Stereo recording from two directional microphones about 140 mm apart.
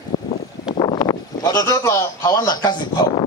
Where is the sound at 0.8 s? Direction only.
35° left (ahead or behind).